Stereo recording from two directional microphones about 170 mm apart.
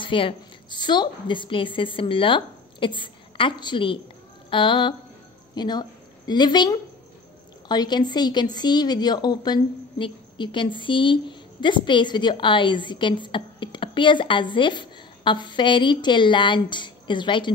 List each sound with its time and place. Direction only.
0.0 s a woman's voice: 30° left (ahead or behind)